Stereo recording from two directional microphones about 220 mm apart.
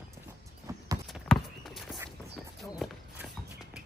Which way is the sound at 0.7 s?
15° right (ahead or behind).